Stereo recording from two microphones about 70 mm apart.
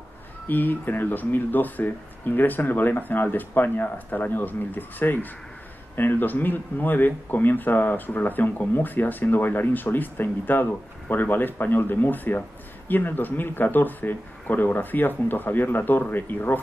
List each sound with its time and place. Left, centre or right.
0.5 s speech: left